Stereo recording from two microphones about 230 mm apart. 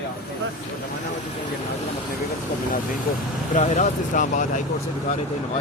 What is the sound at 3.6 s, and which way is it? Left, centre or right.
Speech, left.